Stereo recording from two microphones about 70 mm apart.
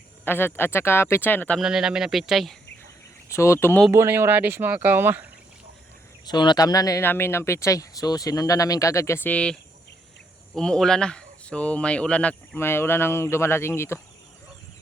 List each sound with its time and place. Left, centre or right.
0.3 s speech: left
1.3 s speech: left
1.6 s speech: centre
3.2 s speech: left
3.9 s speech: right
6.2 s speech: left
7.0 s speech: left
9.2 s speech: centre
12.5 s speech: left